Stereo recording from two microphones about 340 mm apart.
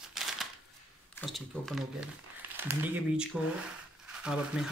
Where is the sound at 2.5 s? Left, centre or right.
Centre.